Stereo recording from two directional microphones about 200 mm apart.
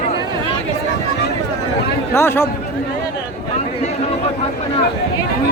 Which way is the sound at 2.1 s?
10° left (ahead or behind).